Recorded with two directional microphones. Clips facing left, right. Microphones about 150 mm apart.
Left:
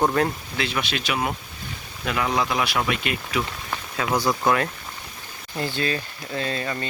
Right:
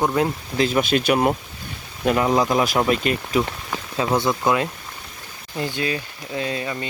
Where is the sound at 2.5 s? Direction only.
40° right (ahead or behind).